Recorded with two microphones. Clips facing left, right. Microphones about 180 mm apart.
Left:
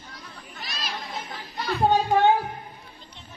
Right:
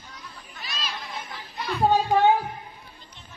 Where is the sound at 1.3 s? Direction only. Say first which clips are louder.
Left 2 dB; 45° left (ahead or behind).